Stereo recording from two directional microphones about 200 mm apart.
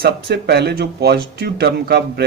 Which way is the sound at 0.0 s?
50° right (ahead or behind).